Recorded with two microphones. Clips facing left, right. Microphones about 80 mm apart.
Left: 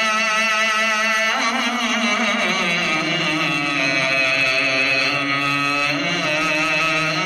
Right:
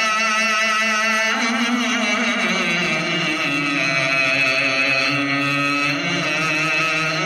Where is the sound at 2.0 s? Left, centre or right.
Centre.